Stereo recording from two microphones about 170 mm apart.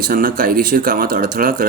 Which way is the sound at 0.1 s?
55° right (ahead or behind).